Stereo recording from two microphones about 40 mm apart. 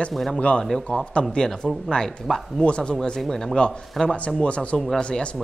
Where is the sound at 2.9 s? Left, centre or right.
Centre.